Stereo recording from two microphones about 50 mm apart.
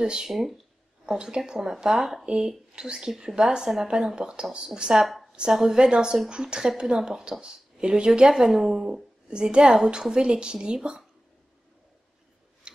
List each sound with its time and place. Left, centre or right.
0.0 s a woman's voice: centre
0.3 s speech: centre
1.0 s a woman's voice: centre
2.2 s a woman's voice: centre
5.0 s a sound: centre
5.3 s a woman's voice: centre
12.7 s a sound: centre